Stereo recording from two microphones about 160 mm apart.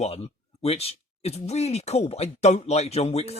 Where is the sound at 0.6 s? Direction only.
40° left (ahead or behind).